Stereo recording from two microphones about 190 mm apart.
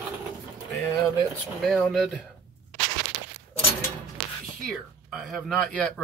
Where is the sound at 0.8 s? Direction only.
15° left (ahead or behind).